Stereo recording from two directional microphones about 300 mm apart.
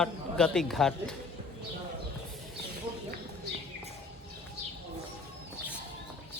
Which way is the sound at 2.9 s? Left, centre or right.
Centre.